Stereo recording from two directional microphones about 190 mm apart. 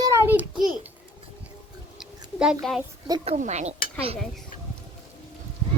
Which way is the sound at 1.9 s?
5° right (ahead or behind).